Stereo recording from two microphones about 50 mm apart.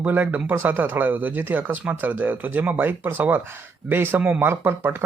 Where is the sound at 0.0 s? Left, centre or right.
Right.